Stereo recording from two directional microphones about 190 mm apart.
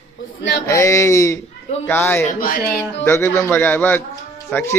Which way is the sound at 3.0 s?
10° left (ahead or behind).